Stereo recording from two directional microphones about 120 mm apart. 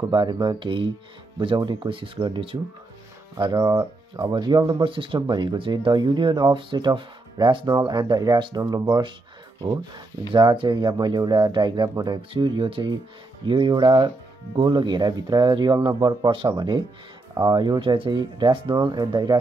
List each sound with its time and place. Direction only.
0.1 s speech: 40° right (ahead or behind)
3.5 s speech: 30° right (ahead or behind)
4.2 s speech: 40° right (ahead or behind)
10.3 s speech: 45° right (ahead or behind)